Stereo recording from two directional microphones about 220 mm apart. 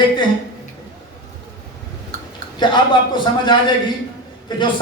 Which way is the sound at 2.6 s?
20° left (ahead or behind).